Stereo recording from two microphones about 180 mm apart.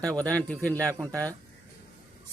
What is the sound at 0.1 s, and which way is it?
Speech, 20° right (ahead or behind).